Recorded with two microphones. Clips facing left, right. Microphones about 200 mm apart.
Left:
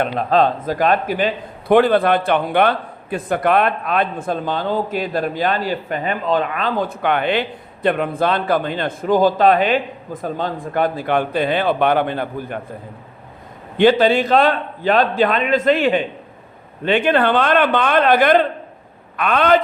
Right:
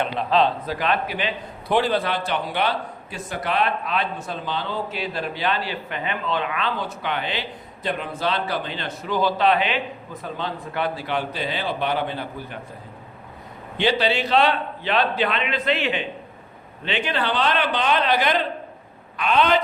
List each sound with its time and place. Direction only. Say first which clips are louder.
0.0 s a man's voice: left 4 dB; 45° left (ahead or behind)
13.7 s a man's voice: left 8 dB; 50° left (ahead or behind)